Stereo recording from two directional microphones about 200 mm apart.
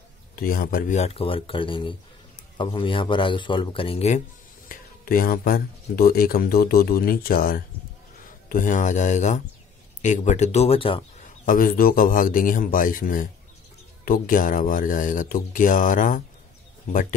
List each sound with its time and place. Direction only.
0.4 s a man's voice: 45° left (ahead or behind); by 4.2 s 30° left (ahead or behind)
4.6 s speech: 45° left (ahead or behind); by 11.1 s 25° left (ahead or behind)
11.4 s speech: 45° left (ahead or behind)